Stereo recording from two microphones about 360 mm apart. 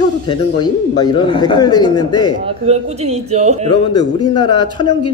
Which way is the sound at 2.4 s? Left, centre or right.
Centre.